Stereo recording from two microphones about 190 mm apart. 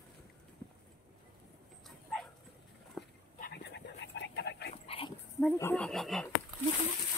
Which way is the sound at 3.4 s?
60° left (ahead or behind).